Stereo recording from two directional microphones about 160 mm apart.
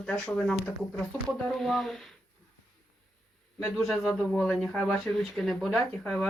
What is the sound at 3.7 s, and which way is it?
Speech, centre (ahead or behind).